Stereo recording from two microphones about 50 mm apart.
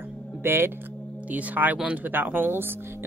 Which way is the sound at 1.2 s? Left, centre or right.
Right.